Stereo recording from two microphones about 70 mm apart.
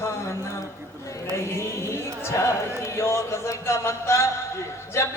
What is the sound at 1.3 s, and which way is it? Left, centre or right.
A man's voice, left.